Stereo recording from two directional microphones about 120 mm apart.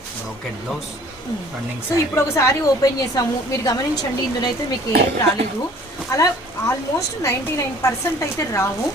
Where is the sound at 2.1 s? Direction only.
25° left (ahead or behind).